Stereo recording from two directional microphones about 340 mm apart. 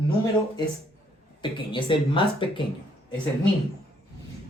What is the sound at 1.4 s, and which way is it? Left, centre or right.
Speech, centre.